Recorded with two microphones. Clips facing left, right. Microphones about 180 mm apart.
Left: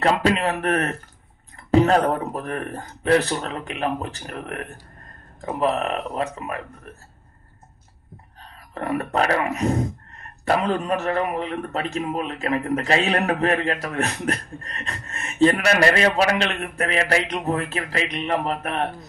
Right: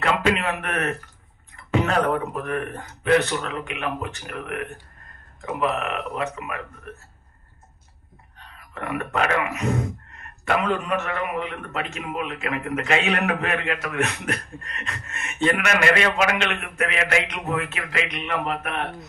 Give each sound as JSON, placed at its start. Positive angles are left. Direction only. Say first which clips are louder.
{"t": 0.0, "sound": "a man's voice", "louder": "left 2 dB", "side_deg": 35}
{"t": 8.4, "sound": "a man's voice", "louder": "left 3 dB", "side_deg": 35}